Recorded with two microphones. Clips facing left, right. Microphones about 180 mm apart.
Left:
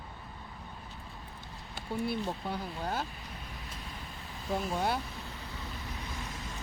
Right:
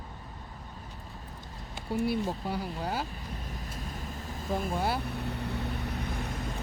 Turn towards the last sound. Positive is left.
turn(degrees=-60)  # may be behind; listen again after turning